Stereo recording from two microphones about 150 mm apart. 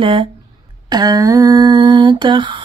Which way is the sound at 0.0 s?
35° right (ahead or behind).